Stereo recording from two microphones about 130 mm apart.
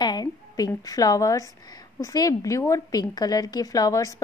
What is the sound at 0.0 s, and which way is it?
A woman's voice, 30° left (ahead or behind).